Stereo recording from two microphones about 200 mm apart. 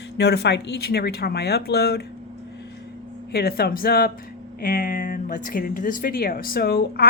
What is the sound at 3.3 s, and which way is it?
Speech, 50° left (ahead or behind).